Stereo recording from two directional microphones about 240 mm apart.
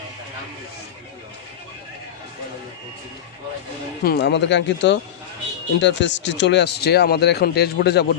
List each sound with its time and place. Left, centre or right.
4.0 s speech: left